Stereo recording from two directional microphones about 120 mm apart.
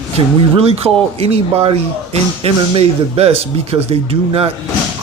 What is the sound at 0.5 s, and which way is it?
A man's voice, 55° right (ahead or behind).